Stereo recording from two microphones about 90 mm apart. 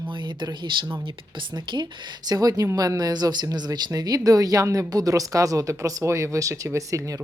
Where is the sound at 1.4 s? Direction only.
60° right (ahead or behind).